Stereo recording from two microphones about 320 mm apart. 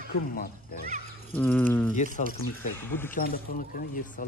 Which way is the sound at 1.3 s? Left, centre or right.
Centre.